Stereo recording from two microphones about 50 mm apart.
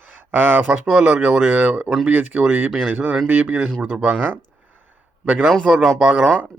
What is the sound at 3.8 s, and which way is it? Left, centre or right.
Speech, right.